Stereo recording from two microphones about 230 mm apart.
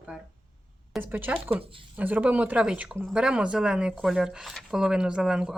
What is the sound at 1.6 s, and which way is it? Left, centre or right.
Speech, right.